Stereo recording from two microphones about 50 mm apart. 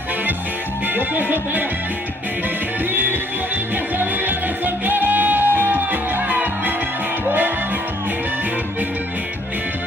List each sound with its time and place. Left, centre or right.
0.8 s music: right
2.9 s music: right